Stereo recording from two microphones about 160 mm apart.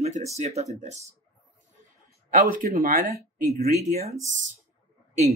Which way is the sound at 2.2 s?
55° right (ahead or behind).